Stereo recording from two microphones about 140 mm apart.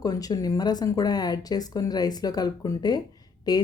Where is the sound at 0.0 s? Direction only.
25° left (ahead or behind).